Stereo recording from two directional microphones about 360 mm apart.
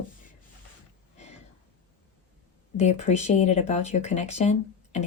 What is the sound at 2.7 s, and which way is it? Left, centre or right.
Speech, centre.